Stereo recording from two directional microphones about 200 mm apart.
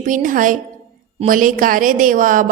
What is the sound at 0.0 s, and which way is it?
A woman's voice, 40° right (ahead or behind).